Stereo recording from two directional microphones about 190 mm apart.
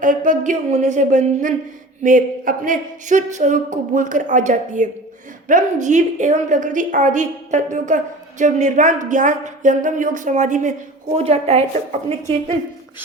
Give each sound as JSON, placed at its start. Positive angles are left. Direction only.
{"t": 0.0, "sound": "a woman's voice", "side_deg": -45}